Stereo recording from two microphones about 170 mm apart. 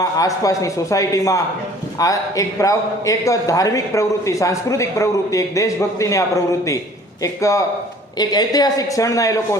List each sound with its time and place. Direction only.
0.0 s a man's voice: 20° left (ahead or behind)